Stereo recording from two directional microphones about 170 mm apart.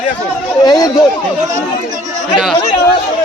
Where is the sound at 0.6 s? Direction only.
25° left (ahead or behind).